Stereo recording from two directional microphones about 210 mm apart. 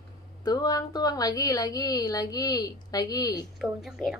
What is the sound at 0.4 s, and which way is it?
A woman's voice, 20° left (ahead or behind).